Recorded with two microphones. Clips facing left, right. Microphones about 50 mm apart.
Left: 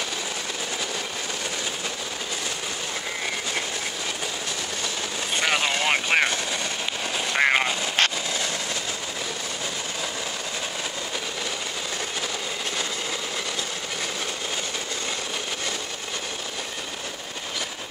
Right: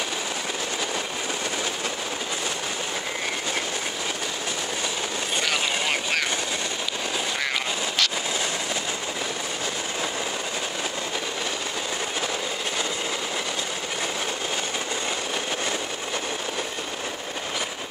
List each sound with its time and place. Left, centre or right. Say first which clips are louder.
5.4 s vehicle: left 4 dB; centre
7.3 s vehicle: left 6 dB; left